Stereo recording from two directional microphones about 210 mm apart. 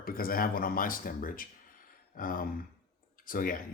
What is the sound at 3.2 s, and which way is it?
Speech, 40° left (ahead or behind).